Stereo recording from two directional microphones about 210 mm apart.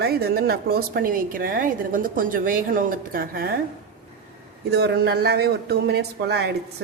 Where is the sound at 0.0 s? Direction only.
50° right (ahead or behind).